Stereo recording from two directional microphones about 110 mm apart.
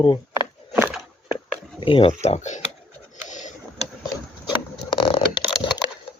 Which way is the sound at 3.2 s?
90° left.